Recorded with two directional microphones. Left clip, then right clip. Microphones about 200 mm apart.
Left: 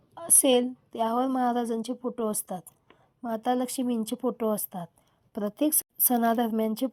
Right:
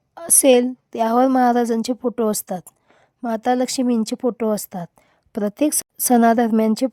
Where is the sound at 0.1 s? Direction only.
55° right (ahead or behind).